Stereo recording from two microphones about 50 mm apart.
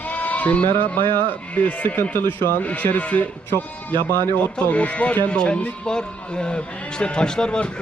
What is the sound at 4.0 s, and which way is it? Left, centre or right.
Speech, left.